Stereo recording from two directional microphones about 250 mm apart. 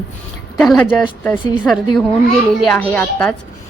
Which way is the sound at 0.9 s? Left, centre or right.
Centre.